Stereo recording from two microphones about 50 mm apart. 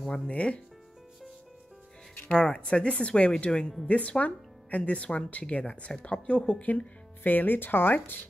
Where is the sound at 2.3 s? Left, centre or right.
Centre.